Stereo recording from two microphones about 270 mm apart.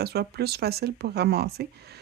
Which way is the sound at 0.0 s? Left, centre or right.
Right.